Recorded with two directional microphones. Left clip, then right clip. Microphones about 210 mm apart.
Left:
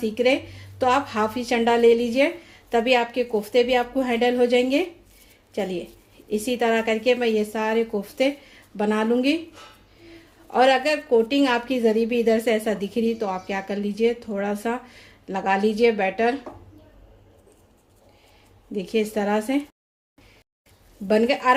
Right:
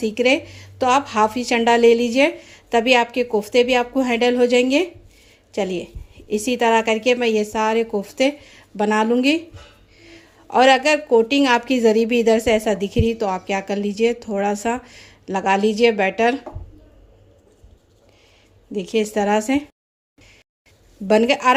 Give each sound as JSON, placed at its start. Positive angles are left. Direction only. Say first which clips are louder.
{"t": 0.0, "sound": "a woman's voice", "louder": "right 3 dB", "side_deg": -25}
{"t": 18.7, "sound": "a woman's voice", "louder": "right 3 dB", "side_deg": -20}
{"t": 21.1, "sound": "a woman's voice", "louder": "right 4 dB", "side_deg": -25}